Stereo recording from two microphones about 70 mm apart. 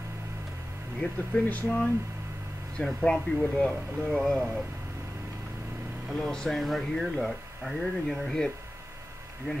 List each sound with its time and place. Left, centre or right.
1.0 s speech: centre
2.8 s speech: centre
6.1 s speech: centre